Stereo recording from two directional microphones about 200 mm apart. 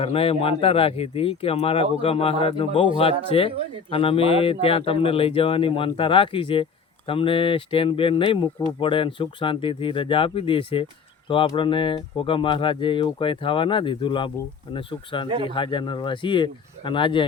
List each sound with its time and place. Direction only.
0.0 s speech: 30° left (ahead or behind)